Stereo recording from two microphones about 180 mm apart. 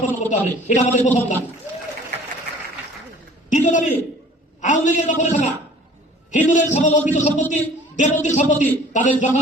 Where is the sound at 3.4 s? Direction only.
45° left (ahead or behind).